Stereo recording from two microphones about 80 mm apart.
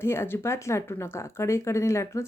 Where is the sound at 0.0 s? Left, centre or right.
Left.